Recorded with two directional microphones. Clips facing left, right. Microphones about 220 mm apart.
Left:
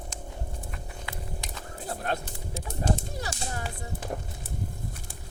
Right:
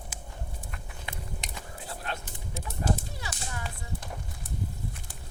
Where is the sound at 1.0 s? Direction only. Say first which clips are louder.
Even; 20° right (ahead or behind).